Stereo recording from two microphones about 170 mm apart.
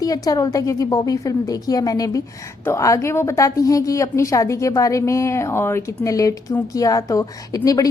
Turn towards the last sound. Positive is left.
turn(degrees=20)  # may be behind; listen again after turning